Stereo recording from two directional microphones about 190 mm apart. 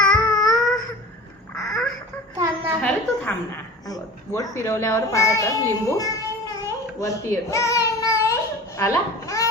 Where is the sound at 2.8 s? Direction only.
10° left (ahead or behind).